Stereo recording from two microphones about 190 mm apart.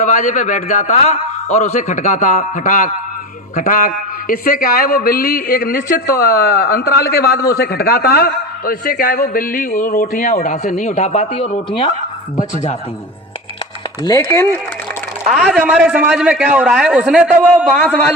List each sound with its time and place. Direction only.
0.0 s a man's voice: 40° left (ahead or behind)
14.0 s speech: 20° left (ahead or behind)
15.3 s a man's voice: centre (ahead or behind)